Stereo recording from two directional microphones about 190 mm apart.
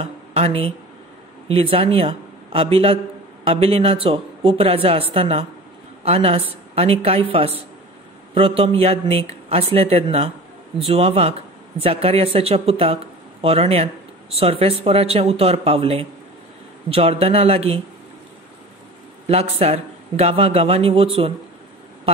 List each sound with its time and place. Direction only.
0.0 s a woman's voice: 30° right (ahead or behind)
19.2 s a woman's voice: 35° right (ahead or behind)